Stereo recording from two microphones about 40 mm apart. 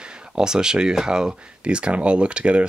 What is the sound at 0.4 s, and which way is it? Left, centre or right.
Speech, centre.